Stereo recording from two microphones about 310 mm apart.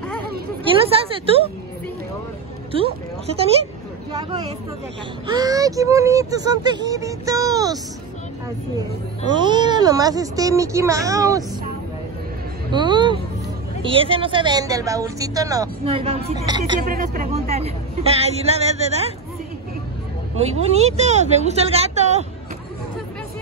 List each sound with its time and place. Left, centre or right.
0.7 s a woman's voice: centre
2.7 s a woman's voice: centre
5.2 s a woman's voice: centre
9.3 s a woman's voice: centre
12.7 s a woman's voice: centre
16.8 s speech: right
20.3 s a woman's voice: centre